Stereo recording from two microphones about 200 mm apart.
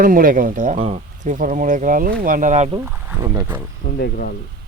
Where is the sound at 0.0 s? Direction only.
45° right (ahead or behind).